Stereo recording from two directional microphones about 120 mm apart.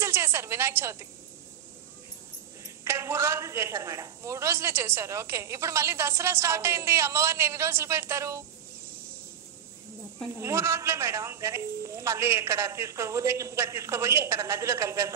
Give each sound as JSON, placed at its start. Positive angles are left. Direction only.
{"t": 0.0, "sound": "a woman's voice", "side_deg": -20}
{"t": 2.6, "sound": "a woman's voice", "side_deg": -25}
{"t": 10.4, "sound": "a woman's voice", "side_deg": -20}